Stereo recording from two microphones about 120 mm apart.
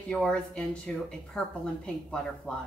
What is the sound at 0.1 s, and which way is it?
Speech, 5° left (ahead or behind).